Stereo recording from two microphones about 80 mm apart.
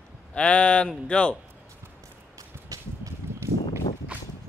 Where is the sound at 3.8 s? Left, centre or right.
Left.